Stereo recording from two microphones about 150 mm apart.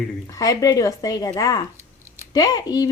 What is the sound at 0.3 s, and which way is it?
A woman's voice, 25° left (ahead or behind).